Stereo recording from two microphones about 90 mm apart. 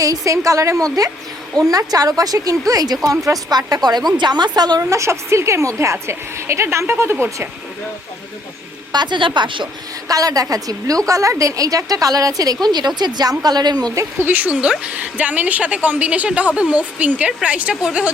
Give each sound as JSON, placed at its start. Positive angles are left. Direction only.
{"t": 0.0, "sound": "a woman's voice", "side_deg": -40}
{"t": 4.8, "sound": "a woman's voice", "side_deg": -35}
{"t": 8.9, "sound": "a woman's voice", "side_deg": -55}
{"t": 10.1, "sound": "a woman's voice", "side_deg": -40}
{"t": 14.3, "sound": "a woman's voice", "side_deg": -20}